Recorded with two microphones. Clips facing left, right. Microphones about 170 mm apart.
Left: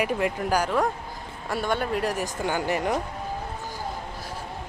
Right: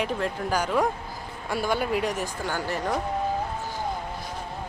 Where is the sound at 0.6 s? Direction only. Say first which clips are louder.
Even; centre (ahead or behind).